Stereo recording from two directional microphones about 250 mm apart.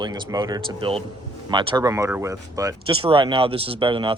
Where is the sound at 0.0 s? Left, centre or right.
Centre.